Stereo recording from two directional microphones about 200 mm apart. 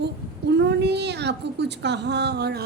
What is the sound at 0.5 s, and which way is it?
A woman's voice, 60° right (ahead or behind).